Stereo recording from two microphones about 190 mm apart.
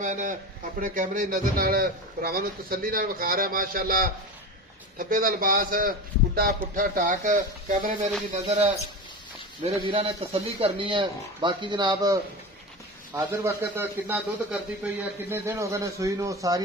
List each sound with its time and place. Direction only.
0.0 s a man's voice: 40° right (ahead or behind); by 16.6 s 20° right (ahead or behind)